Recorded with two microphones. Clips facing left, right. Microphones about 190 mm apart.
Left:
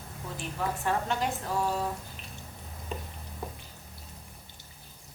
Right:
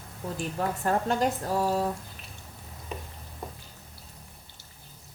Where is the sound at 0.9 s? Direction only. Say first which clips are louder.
Right 5 dB; 40° right (ahead or behind).